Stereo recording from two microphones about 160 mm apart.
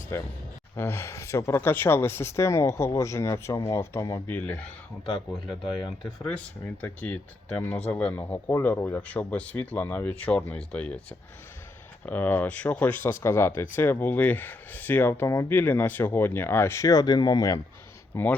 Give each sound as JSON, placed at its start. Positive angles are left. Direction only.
{"t": 0.1, "sound": "speech", "side_deg": 15}
{"t": 12.0, "sound": "speech", "side_deg": 10}
{"t": 18.1, "sound": "speech", "side_deg": 10}